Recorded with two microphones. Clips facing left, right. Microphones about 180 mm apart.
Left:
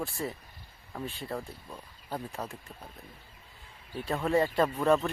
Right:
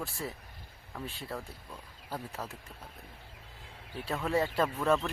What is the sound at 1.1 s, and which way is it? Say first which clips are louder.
Speech: left 3 dB; centre (ahead or behind).